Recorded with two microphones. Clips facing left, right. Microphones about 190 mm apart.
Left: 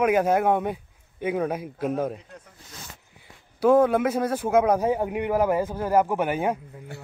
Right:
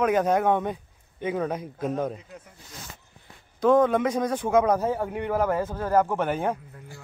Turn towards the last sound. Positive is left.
turn(degrees=10)  # may be behind; listen again after turning